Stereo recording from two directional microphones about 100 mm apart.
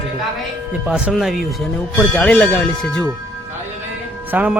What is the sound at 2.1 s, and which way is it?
Speech, 15° left (ahead or behind).